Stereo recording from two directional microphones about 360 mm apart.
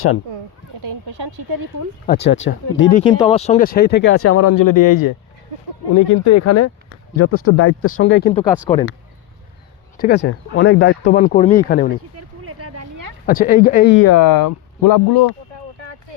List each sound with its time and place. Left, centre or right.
0.8 s a sound: right
2.0 s speech: left
3.0 s speech: centre; by 5.1 s left
5.9 s speech: left
8.2 s speech: centre
8.4 s speech: centre
10.0 s speech: left
12.1 s a sound: right
13.2 s speech: left
14.3 s speech: left